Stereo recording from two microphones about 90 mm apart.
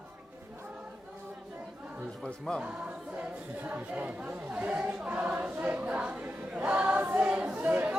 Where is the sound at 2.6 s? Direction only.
15° right (ahead or behind).